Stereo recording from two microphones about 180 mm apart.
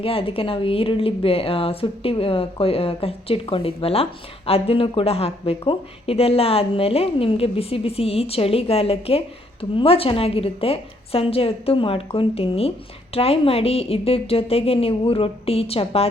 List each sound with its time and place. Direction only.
0.0 s speech: 30° left (ahead or behind)